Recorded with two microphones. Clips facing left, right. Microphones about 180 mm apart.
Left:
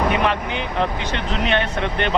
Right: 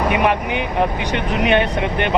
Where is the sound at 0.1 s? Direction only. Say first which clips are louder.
Right 3 dB; 15° right (ahead or behind).